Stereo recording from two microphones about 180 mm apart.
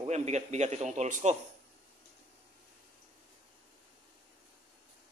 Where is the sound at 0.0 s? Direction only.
40° right (ahead or behind).